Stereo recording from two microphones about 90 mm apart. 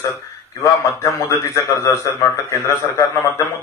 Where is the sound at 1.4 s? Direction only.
30° left (ahead or behind).